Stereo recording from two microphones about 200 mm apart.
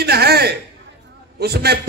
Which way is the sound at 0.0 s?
50° right (ahead or behind).